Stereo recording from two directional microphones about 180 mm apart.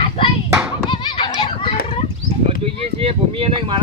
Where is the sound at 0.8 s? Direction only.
25° left (ahead or behind).